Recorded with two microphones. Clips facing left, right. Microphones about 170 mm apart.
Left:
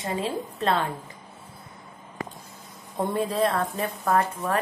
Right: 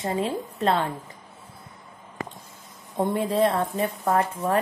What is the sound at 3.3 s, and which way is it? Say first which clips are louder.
Speech: right 2 dB; 25° right (ahead or behind).